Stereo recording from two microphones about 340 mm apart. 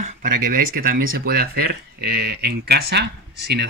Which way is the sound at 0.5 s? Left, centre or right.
Right.